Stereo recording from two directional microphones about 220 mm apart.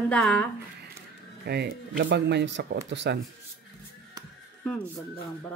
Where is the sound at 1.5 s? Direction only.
50° right (ahead or behind).